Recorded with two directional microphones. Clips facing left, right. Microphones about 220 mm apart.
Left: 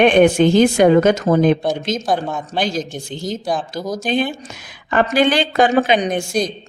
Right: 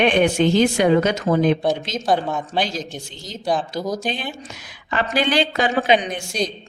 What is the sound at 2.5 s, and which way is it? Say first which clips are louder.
A woman's voice: left 7 dB; 50° left (ahead or behind).